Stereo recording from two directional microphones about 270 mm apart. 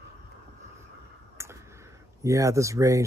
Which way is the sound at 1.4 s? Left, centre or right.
Centre.